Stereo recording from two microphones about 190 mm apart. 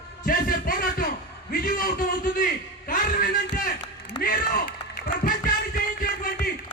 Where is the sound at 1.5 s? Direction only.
50° left (ahead or behind).